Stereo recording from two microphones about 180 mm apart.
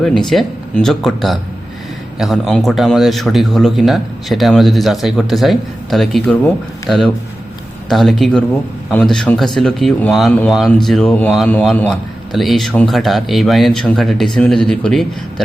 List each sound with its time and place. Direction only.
0.0 s speech: centre (ahead or behind)